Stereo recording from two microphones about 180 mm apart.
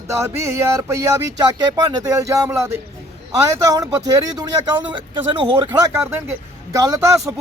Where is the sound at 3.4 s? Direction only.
20° right (ahead or behind).